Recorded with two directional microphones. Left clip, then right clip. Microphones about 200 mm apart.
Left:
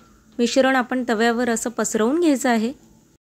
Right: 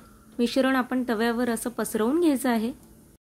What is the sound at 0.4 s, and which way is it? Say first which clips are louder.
A woman's voice: left 6 dB; 15° left (ahead or behind).